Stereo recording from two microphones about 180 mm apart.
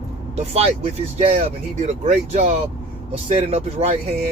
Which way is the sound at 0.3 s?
35° right (ahead or behind).